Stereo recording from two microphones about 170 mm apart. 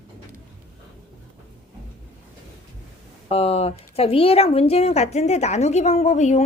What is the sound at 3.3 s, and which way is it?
Speech, 35° left (ahead or behind).